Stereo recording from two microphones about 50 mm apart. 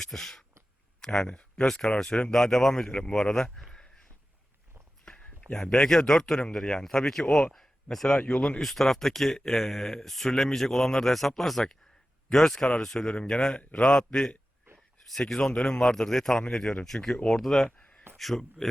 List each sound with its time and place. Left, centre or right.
0.0 s speech: centre
2.3 s speech: centre
3.7 s a sound: centre
5.0 s a sound: left
5.7 s speech: centre
13.6 s a man's voice: left
13.8 s speech: centre
18.2 s speech: centre